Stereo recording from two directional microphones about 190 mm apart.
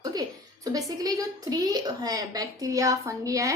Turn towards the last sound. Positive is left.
turn(degrees=-15)  # may be behind; listen again after turning